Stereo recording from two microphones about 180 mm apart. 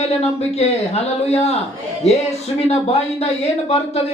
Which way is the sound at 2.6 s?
35° left (ahead or behind).